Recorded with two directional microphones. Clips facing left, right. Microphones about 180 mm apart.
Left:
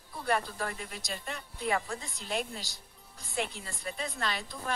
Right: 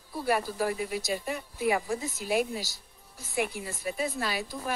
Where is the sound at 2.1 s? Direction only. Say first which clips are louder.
Right 6 dB; 5° right (ahead or behind).